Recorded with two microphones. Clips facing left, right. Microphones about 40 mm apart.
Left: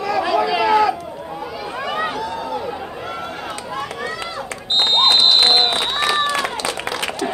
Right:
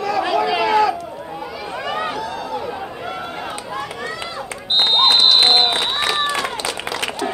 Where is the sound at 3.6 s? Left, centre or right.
Centre.